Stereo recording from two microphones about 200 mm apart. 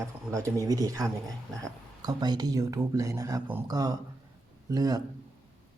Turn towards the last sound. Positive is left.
turn(degrees=-15)  # may be behind; listen again after turning